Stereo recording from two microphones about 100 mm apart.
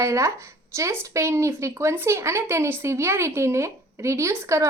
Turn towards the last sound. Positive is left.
turn(degrees=-30)  # may be behind; listen again after turning